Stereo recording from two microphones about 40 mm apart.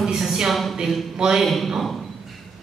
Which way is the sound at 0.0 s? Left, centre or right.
Centre.